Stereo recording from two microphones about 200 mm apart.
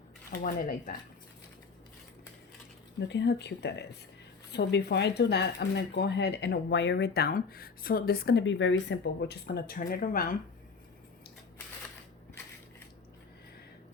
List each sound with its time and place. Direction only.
0.3 s speech: 45° left (ahead or behind)
3.1 s speech: 60° left (ahead or behind); by 10.3 s 40° left (ahead or behind)